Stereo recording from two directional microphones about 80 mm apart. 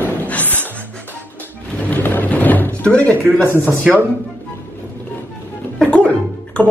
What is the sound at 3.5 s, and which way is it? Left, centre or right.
Speech, right.